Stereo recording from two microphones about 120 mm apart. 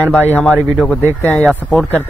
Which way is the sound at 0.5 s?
Centre (ahead or behind).